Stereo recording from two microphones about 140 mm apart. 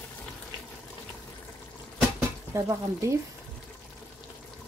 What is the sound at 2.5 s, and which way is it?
Speech, 20° right (ahead or behind).